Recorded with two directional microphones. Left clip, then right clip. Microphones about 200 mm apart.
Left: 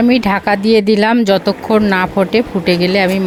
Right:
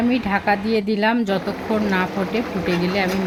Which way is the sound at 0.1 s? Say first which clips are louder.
Left 6 dB; 55° left (ahead or behind).